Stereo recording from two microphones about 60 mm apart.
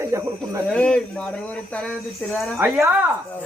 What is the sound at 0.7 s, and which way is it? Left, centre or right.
Speech, centre.